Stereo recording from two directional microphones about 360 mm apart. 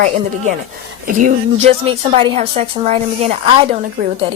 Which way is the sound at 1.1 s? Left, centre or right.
Right.